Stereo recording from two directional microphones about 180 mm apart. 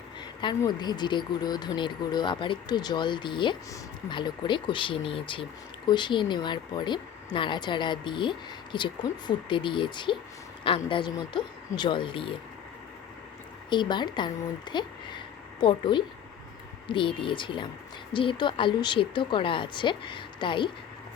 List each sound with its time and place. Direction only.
0.4 s speech: 25° left (ahead or behind)
13.7 s speech: 25° left (ahead or behind)